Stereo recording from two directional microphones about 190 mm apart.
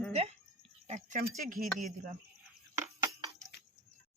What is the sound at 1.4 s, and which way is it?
Chopping, 45° right (ahead or behind).